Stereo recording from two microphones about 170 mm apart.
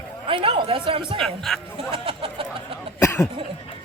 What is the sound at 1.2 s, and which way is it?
Speech, centre (ahead or behind).